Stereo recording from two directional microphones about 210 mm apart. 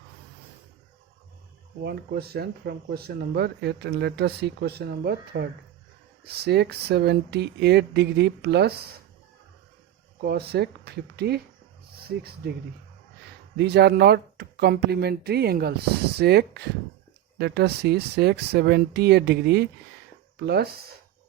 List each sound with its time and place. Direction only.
1.8 s speech: 50° right (ahead or behind)
10.2 s speech: 50° right (ahead or behind)
13.6 s speech: 50° right (ahead or behind)